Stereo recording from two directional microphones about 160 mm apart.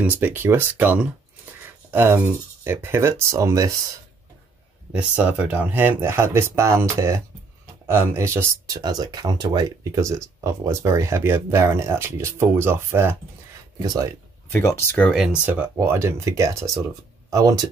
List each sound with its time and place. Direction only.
0.0 s speech: 15° right (ahead or behind)
4.9 s speech: 10° right (ahead or behind); by 14.1 s 25° right (ahead or behind)
14.5 s speech: 15° left (ahead or behind)
15.0 s speech: 5° right (ahead or behind); by 17.6 s 20° right (ahead or behind)